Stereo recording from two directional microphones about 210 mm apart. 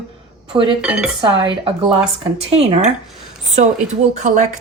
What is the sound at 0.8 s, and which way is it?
Speech, 5° right (ahead or behind).